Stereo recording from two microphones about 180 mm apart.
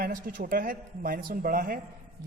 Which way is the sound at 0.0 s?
50° right (ahead or behind).